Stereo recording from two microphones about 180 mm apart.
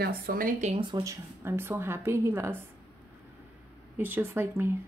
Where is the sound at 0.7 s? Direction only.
25° right (ahead or behind).